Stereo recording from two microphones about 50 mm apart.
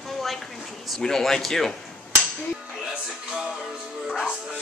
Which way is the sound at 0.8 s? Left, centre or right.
Centre.